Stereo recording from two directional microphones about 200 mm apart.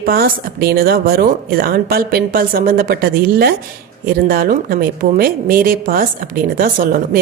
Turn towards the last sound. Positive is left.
turn(degrees=-45)  # may be behind; listen again after turning